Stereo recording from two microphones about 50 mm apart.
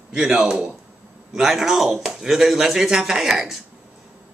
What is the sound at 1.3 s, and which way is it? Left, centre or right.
Speech, centre.